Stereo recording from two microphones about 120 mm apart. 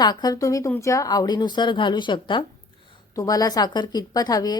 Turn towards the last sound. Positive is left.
turn(degrees=35)  # may be behind; listen again after turning